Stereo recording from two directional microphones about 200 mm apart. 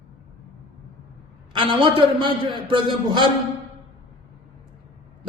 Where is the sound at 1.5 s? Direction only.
25° right (ahead or behind).